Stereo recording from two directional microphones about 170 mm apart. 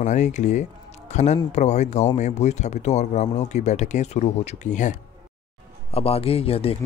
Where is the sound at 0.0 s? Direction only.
45° left (ahead or behind).